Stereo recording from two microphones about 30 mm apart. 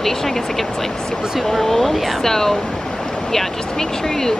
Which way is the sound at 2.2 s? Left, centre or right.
Centre.